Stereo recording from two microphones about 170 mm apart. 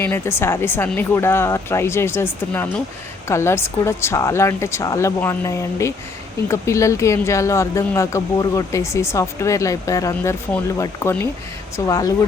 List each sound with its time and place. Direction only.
0.0 s speech: 15° left (ahead or behind)